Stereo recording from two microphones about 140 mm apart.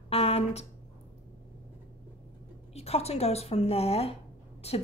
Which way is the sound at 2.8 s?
45° left (ahead or behind).